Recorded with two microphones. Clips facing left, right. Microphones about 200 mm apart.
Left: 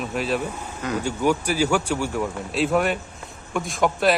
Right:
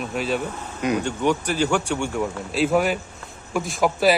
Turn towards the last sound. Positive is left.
turn(degrees=-5)  # may be behind; listen again after turning